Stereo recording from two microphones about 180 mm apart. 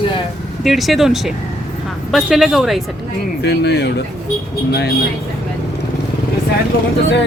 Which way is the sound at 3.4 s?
65° left (ahead or behind).